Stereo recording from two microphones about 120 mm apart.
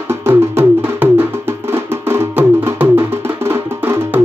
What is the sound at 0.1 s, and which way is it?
Music, 20° right (ahead or behind).